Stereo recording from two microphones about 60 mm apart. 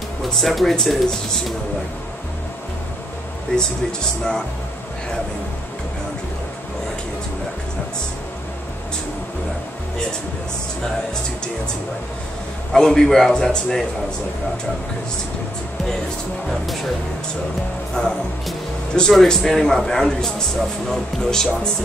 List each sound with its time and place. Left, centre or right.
0.4 s speech: centre
3.5 s a man's voice: centre
12.7 s a man's voice: centre
18.0 s a man's voice: centre